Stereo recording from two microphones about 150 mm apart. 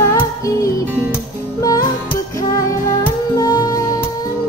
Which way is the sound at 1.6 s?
25° left (ahead or behind).